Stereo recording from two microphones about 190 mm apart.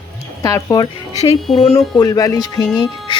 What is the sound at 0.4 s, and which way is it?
Speech, 20° left (ahead or behind).